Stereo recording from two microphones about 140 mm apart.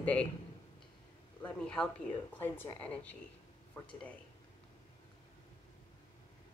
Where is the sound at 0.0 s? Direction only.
10° left (ahead or behind).